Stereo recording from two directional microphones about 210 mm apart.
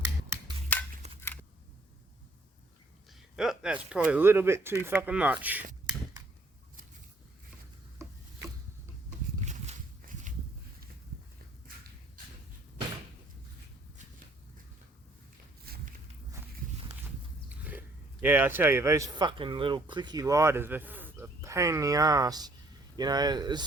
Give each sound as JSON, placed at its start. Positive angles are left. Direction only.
{"t": 1.0, "sound": "a sound", "side_deg": -30}
{"t": 3.1, "sound": "speech", "side_deg": 0}
{"t": 8.0, "sound": "chopping", "side_deg": -15}
{"t": 9.5, "sound": "a sound", "side_deg": -35}
{"t": 15.7, "sound": "walk", "side_deg": -45}
{"t": 17.5, "sound": "speech", "side_deg": -5}